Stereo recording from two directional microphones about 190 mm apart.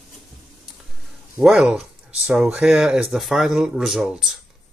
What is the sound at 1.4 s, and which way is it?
Speech, 5° right (ahead or behind).